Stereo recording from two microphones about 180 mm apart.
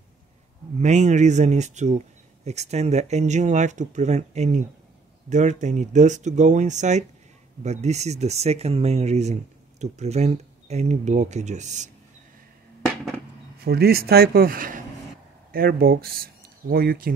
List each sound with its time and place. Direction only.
0.7 s speech: 40° right (ahead or behind)
13.6 s speech: 60° right (ahead or behind)